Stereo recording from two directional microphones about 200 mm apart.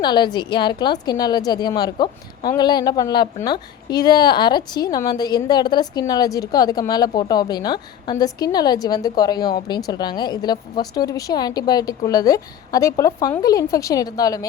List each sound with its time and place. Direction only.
0.0 s a woman's voice: 20° left (ahead or behind)